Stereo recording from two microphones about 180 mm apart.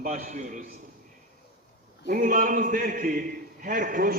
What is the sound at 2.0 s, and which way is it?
A man's voice, 50° right (ahead or behind).